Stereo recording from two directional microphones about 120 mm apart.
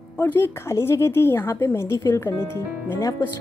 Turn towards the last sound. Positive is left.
turn(degrees=20)  # may be behind; listen again after turning